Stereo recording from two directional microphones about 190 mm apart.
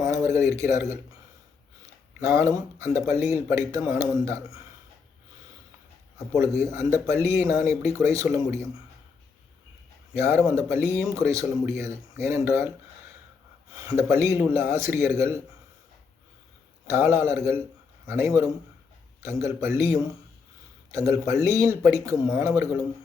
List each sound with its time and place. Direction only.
0.0 s a sound: 15° right (ahead or behind)
0.5 s speech: 15° right (ahead or behind)
2.2 s speech: 15° right (ahead or behind)
6.1 s speech: 15° right (ahead or behind)
10.2 s speech: 15° right (ahead or behind)
13.7 s speech: 15° right (ahead or behind)
16.8 s a man's voice: 15° right (ahead or behind)